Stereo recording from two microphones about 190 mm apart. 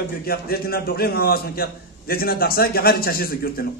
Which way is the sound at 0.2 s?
50° left (ahead or behind).